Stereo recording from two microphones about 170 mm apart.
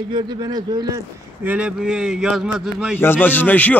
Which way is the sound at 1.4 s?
10° right (ahead or behind).